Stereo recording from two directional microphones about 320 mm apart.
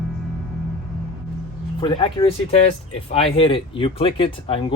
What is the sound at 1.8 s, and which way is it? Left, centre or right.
Speech, centre.